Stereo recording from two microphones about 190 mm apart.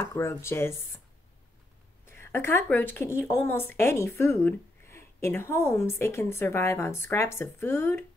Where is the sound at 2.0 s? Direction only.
10° left (ahead or behind).